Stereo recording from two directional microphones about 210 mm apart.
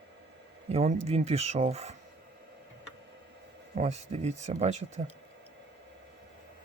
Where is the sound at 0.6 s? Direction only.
30° right (ahead or behind).